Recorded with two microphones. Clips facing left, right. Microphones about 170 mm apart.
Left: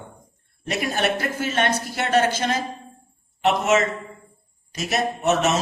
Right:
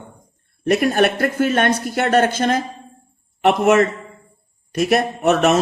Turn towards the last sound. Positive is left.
turn(degrees=-60)  # may be behind; listen again after turning